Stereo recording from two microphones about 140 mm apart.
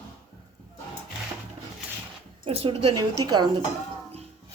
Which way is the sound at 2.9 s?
30° right (ahead or behind).